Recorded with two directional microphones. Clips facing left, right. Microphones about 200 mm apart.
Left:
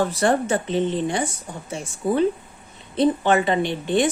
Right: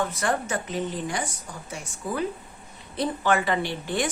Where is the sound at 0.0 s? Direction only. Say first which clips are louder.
Left 6 dB; 30° left (ahead or behind).